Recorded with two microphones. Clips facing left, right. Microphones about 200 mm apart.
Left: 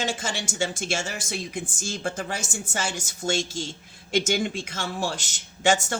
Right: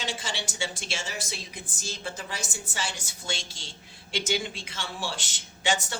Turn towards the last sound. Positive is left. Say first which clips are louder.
# left 6 dB
turn(degrees=45)  # may be behind; listen again after turning